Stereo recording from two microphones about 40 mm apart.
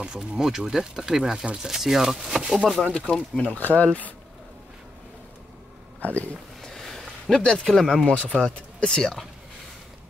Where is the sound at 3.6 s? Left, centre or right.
Left.